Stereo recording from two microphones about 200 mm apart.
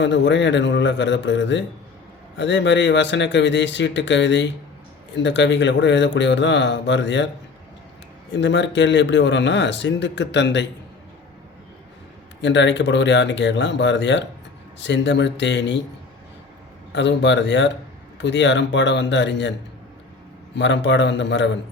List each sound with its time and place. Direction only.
0.0 s speech: 65° left (ahead or behind)
8.3 s speech: 60° left (ahead or behind)
12.4 s speech: 60° left (ahead or behind)
16.9 s speech: 60° left (ahead or behind)
20.6 s speech: 65° left (ahead or behind)